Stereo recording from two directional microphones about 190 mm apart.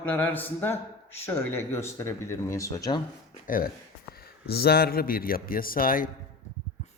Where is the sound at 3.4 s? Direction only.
45° left (ahead or behind).